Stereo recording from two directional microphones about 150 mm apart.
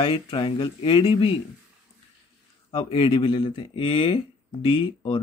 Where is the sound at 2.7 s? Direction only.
40° left (ahead or behind).